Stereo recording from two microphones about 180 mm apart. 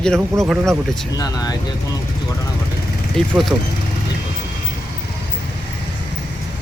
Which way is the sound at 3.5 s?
15° right (ahead or behind).